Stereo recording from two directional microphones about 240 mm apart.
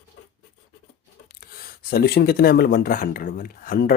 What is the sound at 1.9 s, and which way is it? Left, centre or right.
Speech, left.